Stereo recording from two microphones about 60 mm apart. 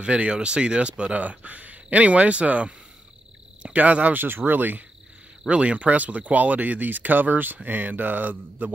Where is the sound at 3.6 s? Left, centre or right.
Right.